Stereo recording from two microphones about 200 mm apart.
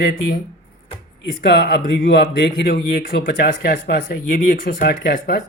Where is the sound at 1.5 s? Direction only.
60° left (ahead or behind).